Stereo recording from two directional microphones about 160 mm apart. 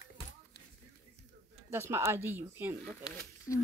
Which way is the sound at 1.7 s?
15° right (ahead or behind).